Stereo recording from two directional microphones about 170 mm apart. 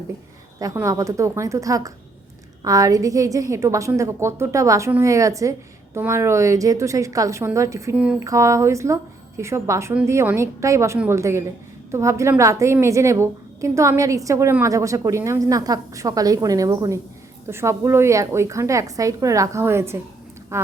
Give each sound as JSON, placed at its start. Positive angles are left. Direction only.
{"t": 0.6, "sound": "a woman's voice", "side_deg": -20}